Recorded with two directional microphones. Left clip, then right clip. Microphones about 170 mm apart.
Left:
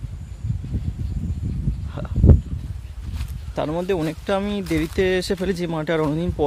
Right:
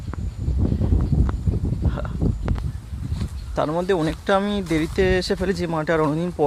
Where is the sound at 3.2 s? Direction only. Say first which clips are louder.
Right 2 dB; 15° left (ahead or behind).